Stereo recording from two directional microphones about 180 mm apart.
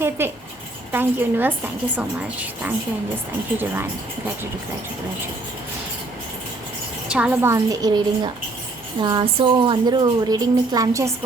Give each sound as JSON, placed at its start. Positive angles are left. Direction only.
{"t": 0.2, "sound": "a woman's voice", "side_deg": -15}
{"t": 7.1, "sound": "a woman's voice", "side_deg": -5}